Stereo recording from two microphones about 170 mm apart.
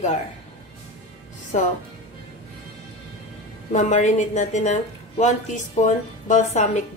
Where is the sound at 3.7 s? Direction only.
45° left (ahead or behind).